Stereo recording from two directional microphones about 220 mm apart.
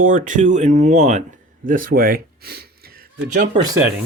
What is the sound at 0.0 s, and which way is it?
Speech, 35° right (ahead or behind).